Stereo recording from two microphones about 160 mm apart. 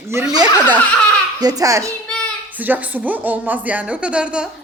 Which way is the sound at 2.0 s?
5° left (ahead or behind).